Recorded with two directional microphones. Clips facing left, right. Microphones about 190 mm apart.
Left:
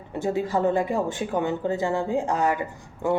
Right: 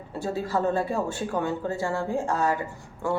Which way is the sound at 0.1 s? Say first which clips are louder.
Left 3 dB; 15° left (ahead or behind).